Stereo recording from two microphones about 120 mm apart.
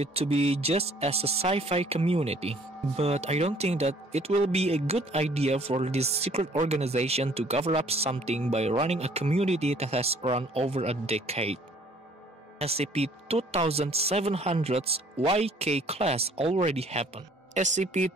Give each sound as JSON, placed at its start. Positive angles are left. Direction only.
{"t": 0.0, "sound": "speech", "side_deg": -55}
{"t": 17.6, "sound": "speech", "side_deg": -90}